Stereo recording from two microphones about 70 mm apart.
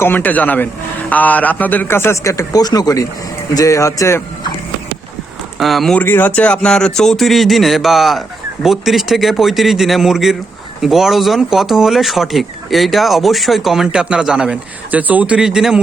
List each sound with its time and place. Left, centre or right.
0.0 s a man's voice: left
2.2 s speech: left
2.6 s speech: left
5.5 s speech: centre
6.0 s speech: left; by 13.8 s centre
13.8 s speech: centre
14.8 s speech: right
15.4 s speech: centre